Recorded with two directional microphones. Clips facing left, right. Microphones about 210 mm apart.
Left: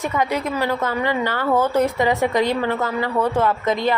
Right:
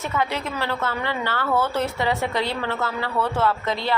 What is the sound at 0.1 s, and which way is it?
A woman's voice, 15° left (ahead or behind).